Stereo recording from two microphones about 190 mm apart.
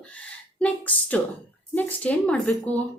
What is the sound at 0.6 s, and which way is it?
A woman's voice, 5° left (ahead or behind).